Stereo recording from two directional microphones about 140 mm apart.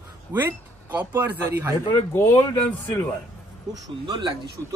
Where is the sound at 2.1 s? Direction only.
15° left (ahead or behind).